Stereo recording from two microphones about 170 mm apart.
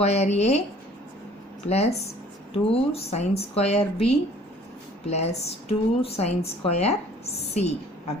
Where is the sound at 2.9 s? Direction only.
40° left (ahead or behind).